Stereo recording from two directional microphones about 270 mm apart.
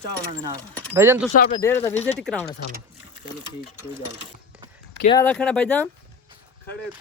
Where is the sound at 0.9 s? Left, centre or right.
Centre.